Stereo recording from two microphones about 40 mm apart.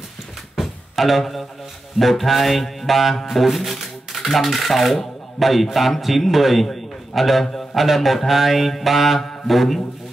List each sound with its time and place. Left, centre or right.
0.6 s music: centre
2.0 s mantra: centre
3.3 s speech: centre
7.5 s mantra: centre